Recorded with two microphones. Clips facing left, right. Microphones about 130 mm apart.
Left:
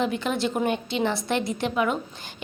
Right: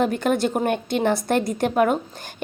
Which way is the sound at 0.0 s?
50° right (ahead or behind).